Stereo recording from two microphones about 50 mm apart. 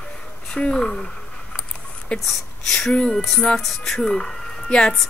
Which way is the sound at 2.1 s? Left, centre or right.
Left.